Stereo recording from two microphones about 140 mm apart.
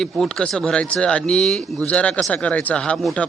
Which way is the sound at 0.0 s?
Centre (ahead or behind).